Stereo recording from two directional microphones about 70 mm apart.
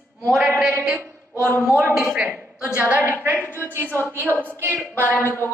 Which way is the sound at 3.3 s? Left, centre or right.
Left.